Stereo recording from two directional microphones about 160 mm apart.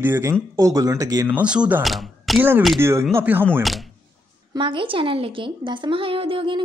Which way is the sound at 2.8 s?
15° right (ahead or behind).